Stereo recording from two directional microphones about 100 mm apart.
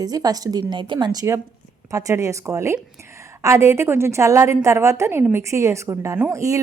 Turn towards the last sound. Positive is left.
turn(degrees=-35)  # may be behind; listen again after turning